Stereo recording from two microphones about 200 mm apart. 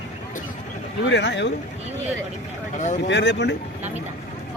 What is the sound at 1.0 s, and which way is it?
Speech, 60° left (ahead or behind).